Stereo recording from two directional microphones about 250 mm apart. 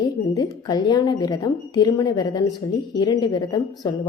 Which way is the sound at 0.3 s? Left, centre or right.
Centre.